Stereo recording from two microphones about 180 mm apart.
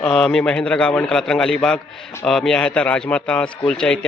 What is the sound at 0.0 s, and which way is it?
A man's voice, 5° left (ahead or behind).